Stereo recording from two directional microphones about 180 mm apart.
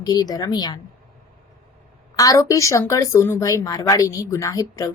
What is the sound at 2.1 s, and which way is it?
Speech, 20° left (ahead or behind).